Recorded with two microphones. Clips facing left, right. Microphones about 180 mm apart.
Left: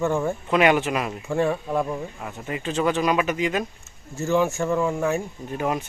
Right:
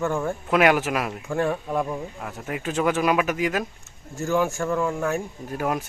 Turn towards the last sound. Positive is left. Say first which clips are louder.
# left 1 dB
turn(degrees=0)  # may be behind; listen again after turning